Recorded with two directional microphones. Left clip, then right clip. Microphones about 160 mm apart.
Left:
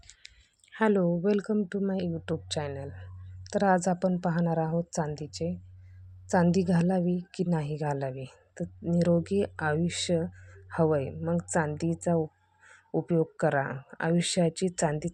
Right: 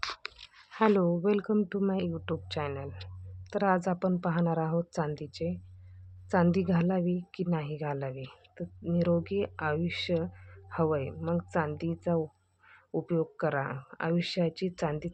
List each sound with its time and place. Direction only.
0.7 s a woman's voice: 15° left (ahead or behind)